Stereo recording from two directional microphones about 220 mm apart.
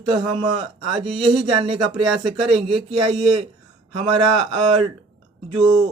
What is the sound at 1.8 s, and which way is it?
Speech, centre (ahead or behind).